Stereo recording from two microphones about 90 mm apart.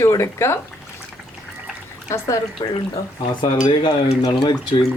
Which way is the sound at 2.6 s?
55° left (ahead or behind).